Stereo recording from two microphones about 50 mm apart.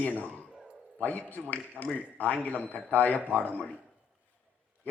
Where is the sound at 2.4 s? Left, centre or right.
Left.